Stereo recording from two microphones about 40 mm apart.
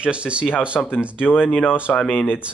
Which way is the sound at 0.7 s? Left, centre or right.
Centre.